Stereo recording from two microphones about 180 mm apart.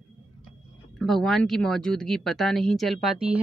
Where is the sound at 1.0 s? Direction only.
Centre (ahead or behind).